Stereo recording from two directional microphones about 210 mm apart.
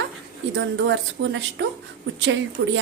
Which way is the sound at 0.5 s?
60° right (ahead or behind).